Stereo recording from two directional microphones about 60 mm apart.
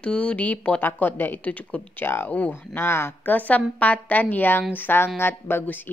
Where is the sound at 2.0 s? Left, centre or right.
Left.